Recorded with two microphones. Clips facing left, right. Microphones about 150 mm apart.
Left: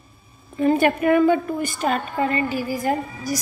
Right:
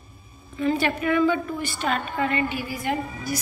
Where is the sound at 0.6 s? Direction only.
45° left (ahead or behind).